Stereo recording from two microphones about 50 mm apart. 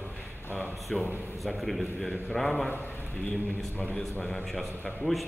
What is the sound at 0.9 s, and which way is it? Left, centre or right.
A man's voice, centre.